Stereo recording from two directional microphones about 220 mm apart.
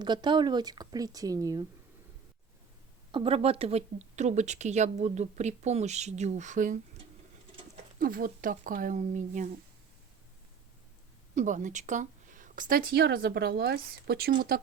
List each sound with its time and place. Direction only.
0.0 s a woman's voice: 20° right (ahead or behind)
3.1 s speech: 25° right (ahead or behind)
7.9 s speech: 40° right (ahead or behind)
11.3 s speech: 35° right (ahead or behind)